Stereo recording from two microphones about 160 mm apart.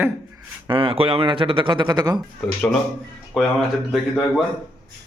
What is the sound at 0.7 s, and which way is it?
Speech, 35° right (ahead or behind).